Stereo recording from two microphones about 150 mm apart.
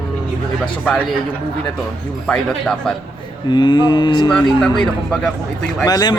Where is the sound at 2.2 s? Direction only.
5° left (ahead or behind).